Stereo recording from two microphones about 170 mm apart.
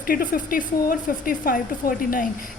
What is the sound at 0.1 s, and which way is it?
A woman's voice, 55° left (ahead or behind).